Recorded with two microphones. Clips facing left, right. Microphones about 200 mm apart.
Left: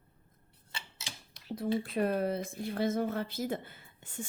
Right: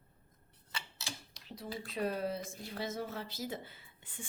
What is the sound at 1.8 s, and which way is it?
Speech, 55° left (ahead or behind).